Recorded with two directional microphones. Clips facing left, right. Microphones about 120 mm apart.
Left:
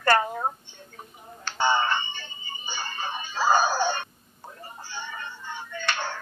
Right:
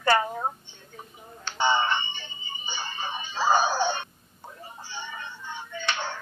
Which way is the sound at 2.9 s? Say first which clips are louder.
Left 1 dB; 45° left (ahead or behind).